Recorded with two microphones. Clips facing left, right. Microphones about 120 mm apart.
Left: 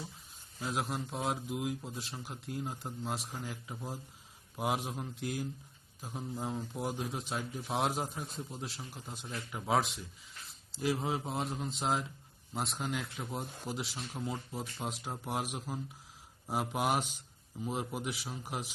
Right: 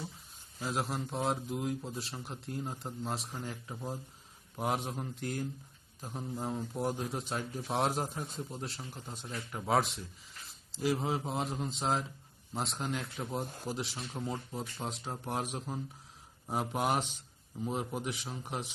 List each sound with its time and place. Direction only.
0.6 s a man's voice: centre (ahead or behind)